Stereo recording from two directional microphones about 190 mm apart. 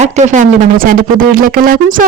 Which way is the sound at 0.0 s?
40° right (ahead or behind).